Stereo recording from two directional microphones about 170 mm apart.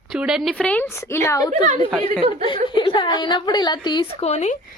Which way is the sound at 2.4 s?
30° left (ahead or behind).